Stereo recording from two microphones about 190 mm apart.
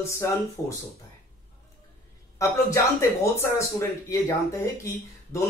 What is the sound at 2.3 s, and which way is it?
Speech, 15° left (ahead or behind).